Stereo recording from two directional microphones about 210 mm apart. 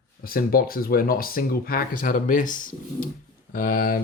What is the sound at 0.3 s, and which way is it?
Speech, 45° left (ahead or behind).